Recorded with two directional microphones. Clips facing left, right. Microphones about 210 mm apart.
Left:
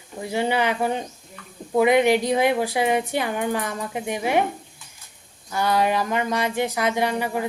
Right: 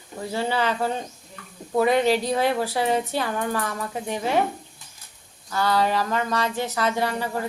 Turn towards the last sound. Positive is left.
turn(degrees=15)  # may be behind; listen again after turning